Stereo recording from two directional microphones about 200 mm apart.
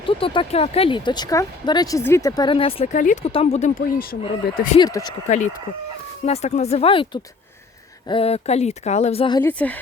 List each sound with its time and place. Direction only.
0.0 s speech: 25° left (ahead or behind); by 4.7 s 45° left (ahead or behind)
4.8 s speech: 15° left (ahead or behind)
5.3 s speech: 35° left (ahead or behind)
9.4 s speech: 10° left (ahead or behind)